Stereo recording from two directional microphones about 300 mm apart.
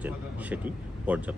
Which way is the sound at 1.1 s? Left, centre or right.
Centre.